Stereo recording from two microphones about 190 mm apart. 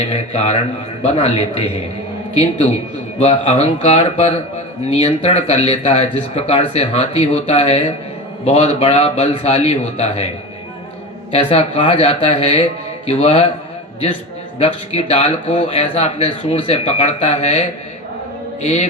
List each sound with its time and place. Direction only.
0.1 s speech: 30° left (ahead or behind)
3.2 s speech: 30° left (ahead or behind)
11.3 s speech: 30° left (ahead or behind)
14.6 s speech: 30° left (ahead or behind)
18.6 s speech: 35° left (ahead or behind)